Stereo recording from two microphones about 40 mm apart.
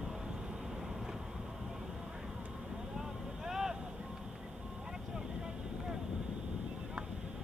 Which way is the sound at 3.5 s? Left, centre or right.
Centre.